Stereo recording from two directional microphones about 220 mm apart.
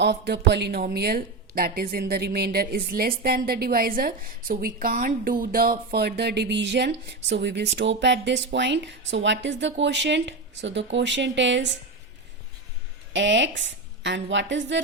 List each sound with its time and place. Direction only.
0.0 s a woman's voice: 50° right (ahead or behind)
13.1 s a woman's voice: 55° right (ahead or behind)